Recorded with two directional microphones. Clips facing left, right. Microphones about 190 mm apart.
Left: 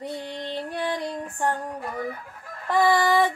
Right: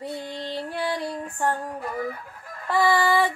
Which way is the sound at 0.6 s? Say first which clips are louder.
Even; 15° left (ahead or behind).